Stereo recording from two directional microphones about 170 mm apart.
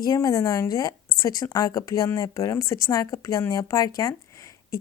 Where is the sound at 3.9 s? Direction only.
20° left (ahead or behind).